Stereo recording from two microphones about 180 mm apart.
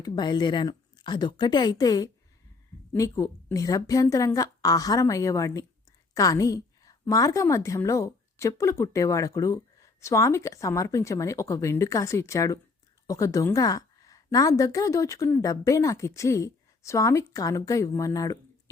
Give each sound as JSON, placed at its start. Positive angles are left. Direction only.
{"t": 0.0, "sound": "a woman's voice", "side_deg": 25}